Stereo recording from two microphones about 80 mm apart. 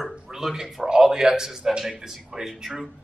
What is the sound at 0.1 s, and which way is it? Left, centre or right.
A man's voice, centre.